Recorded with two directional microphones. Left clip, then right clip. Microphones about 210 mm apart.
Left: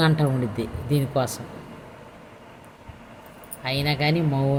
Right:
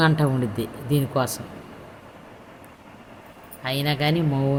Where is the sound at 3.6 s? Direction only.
15° right (ahead or behind).